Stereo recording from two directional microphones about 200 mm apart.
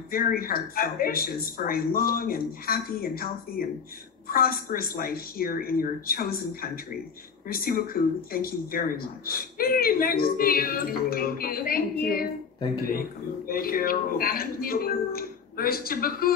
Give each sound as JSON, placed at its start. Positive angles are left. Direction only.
{"t": 0.1, "sound": "speech", "side_deg": 45}
{"t": 13.5, "sound": "speech", "side_deg": 45}